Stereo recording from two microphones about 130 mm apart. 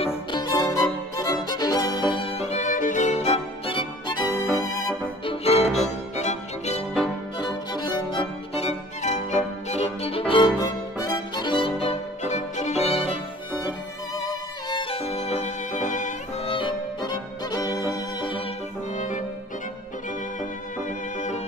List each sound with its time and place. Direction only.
0.3 s music: 30° left (ahead or behind)
1.1 s violin: 30° left (ahead or behind)
4.6 s music: 30° left (ahead or behind)
5.2 s music: 45° left (ahead or behind)
7.3 s music: 35° left (ahead or behind)
8.5 s music: 60° left (ahead or behind); by 10.5 s 45° left (ahead or behind)
10.6 s music: 30° left (ahead or behind); by 13.2 s 50° left (ahead or behind)
13.6 s violin: 30° left (ahead or behind); by 16.2 s 70° left (ahead or behind)
16.4 s violin: 40° left (ahead or behind)
17.9 s music: 40° left (ahead or behind)
18.9 s violin: 70° left (ahead or behind)